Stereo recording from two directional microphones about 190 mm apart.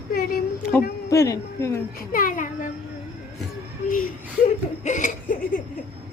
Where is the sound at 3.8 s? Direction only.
45° left (ahead or behind).